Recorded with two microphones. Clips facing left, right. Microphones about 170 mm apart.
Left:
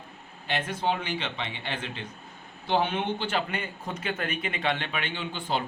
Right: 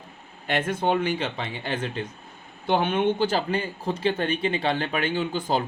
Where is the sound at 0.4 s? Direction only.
50° right (ahead or behind).